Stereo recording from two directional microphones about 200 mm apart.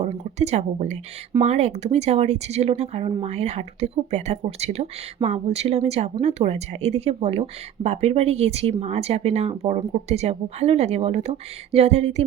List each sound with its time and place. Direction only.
0.0 s speech: 35° right (ahead or behind)